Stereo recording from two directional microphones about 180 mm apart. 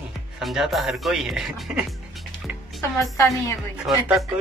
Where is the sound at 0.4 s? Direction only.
Centre (ahead or behind).